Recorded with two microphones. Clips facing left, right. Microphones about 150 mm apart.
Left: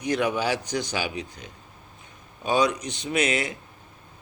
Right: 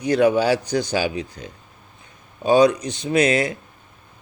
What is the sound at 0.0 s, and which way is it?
Speech, 30° right (ahead or behind).